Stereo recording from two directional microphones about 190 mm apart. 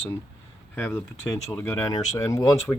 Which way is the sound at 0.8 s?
10° left (ahead or behind).